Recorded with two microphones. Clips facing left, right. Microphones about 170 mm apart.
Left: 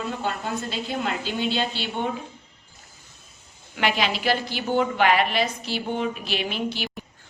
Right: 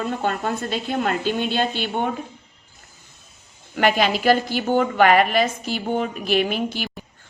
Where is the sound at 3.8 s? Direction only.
50° right (ahead or behind).